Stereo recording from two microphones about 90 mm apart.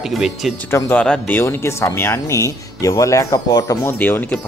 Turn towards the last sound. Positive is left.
turn(degrees=20)  # may be behind; listen again after turning